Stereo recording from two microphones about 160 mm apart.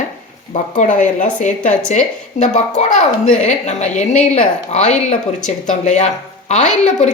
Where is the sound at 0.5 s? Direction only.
50° left (ahead or behind).